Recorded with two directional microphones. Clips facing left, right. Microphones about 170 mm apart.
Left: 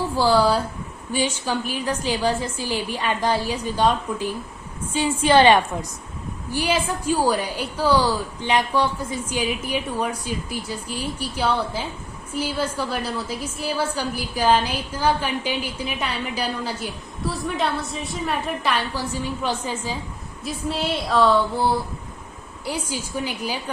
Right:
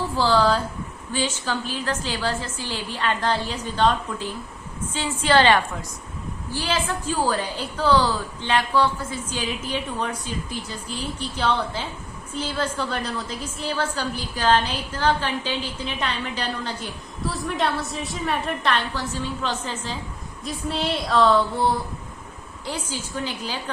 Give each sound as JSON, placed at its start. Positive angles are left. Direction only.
{"t": 0.2, "sound": "a woman's voice", "side_deg": 10}